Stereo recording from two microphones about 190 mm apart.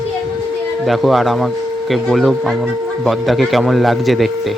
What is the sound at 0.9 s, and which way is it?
Speech, centre (ahead or behind).